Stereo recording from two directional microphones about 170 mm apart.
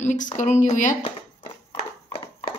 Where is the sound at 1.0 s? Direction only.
30° left (ahead or behind).